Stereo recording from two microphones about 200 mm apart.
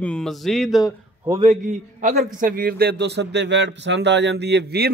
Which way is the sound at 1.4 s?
40° right (ahead or behind).